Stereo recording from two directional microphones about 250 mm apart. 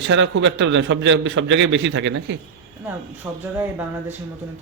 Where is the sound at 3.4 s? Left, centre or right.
Centre.